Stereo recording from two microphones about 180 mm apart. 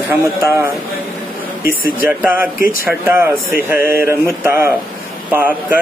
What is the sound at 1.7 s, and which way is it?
Speech, 55° left (ahead or behind).